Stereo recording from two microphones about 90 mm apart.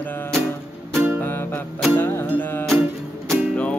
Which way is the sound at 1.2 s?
25° left (ahead or behind).